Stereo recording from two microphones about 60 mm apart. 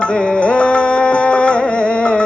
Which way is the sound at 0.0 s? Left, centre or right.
Centre.